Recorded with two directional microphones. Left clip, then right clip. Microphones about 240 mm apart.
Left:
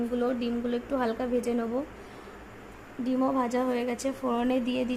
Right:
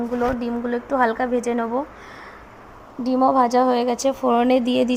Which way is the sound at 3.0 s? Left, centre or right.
Right.